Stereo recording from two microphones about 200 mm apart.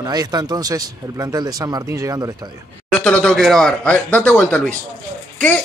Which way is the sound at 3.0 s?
5° left (ahead or behind).